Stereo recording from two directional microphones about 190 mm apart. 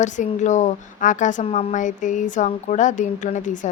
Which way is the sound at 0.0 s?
40° left (ahead or behind).